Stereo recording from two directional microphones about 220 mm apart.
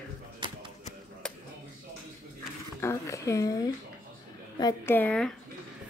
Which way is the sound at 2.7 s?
15° left (ahead or behind).